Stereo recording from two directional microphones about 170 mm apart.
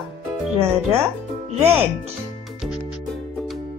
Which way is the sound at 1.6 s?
15° right (ahead or behind).